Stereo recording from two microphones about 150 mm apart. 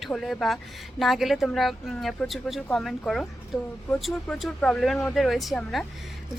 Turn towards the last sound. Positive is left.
turn(degrees=0)  # may be behind; listen again after turning